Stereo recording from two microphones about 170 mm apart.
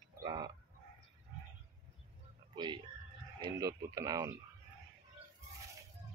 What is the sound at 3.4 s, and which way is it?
Speech, 20° right (ahead or behind).